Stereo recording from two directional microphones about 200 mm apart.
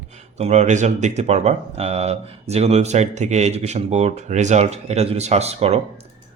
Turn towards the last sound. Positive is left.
turn(degrees=-30)  # may be behind; listen again after turning